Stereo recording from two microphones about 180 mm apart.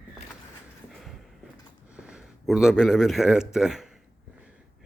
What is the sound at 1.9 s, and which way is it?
Speech, 5° right (ahead or behind).